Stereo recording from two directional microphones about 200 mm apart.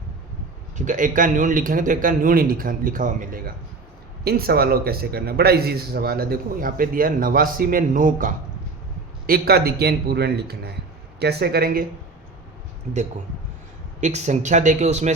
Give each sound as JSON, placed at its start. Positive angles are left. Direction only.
{"t": 0.8, "sound": "a man's voice", "side_deg": -40}
{"t": 14.0, "sound": "a man's voice", "side_deg": -35}